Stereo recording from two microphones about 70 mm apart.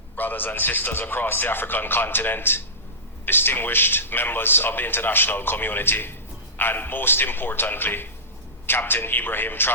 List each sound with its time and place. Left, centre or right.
0.2 s a man's voice: left